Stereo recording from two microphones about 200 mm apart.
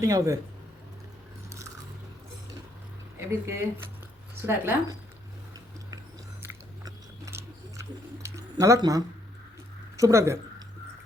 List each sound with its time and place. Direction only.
0.0 s speech: 15° right (ahead or behind)
3.2 s speech: 10° right (ahead or behind)
6.4 s biting: 15° right (ahead or behind)
8.2 s a sound: 15° right (ahead or behind)
10.0 s speech: 15° right (ahead or behind)